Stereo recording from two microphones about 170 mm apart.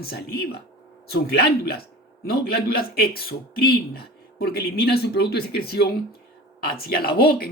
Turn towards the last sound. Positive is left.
turn(degrees=65)  # may be behind; listen again after turning